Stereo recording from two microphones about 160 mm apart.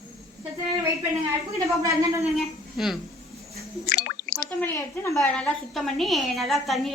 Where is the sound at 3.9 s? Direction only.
80° left.